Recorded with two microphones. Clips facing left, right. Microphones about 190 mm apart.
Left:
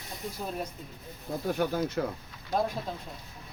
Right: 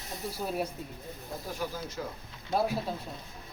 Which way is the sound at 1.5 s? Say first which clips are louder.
Left 9 dB; 60° left (ahead or behind).